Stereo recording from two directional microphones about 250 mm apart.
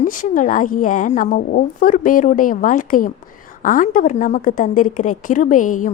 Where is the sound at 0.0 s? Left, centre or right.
Left.